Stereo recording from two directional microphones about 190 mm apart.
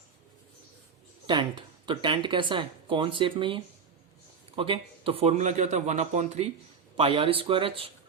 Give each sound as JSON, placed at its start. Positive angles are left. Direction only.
{"t": 1.3, "sound": "a man's voice", "side_deg": -25}